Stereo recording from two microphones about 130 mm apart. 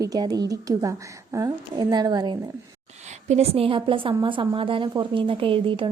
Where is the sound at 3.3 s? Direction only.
50° right (ahead or behind).